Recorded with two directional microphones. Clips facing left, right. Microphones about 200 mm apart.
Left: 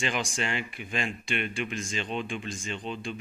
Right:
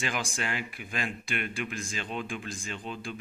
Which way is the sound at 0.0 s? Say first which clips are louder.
Left 3 dB; centre (ahead or behind).